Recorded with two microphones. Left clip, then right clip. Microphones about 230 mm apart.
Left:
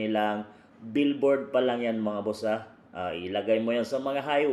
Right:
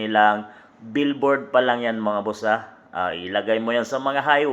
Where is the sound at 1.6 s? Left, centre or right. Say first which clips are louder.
Right 6 dB; right.